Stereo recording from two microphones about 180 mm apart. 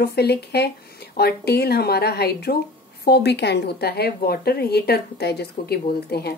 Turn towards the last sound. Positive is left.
turn(degrees=60)  # may be behind; listen again after turning